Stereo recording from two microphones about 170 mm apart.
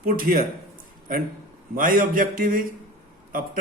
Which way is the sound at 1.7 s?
55° right (ahead or behind).